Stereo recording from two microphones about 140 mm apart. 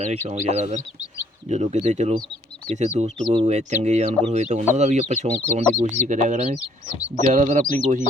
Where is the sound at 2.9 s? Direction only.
55° right (ahead or behind).